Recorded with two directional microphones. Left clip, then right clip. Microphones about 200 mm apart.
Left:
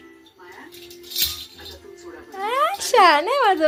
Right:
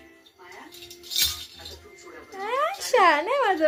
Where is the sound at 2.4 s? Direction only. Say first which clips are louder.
Left 5 dB; 20° left (ahead or behind).